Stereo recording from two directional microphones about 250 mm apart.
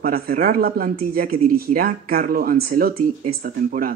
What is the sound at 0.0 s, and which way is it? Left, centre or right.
Speech, right.